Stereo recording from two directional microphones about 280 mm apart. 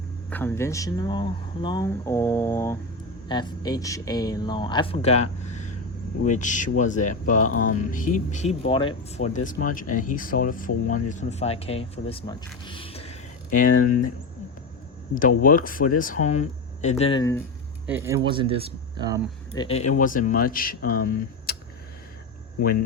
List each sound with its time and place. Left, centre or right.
0.3 s speech: centre; by 14.1 s left
15.1 s speech: left; by 17.4 s centre
17.8 s speech: centre
19.5 s speech: left